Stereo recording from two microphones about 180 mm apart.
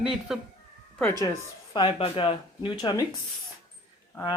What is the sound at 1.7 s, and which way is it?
Speech, 25° left (ahead or behind).